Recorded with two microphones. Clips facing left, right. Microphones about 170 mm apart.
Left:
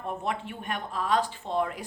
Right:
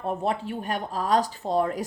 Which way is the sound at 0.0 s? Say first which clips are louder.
Right 5 dB; 35° right (ahead or behind).